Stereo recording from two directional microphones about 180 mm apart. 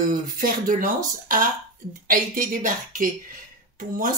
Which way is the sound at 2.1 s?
50° right (ahead or behind).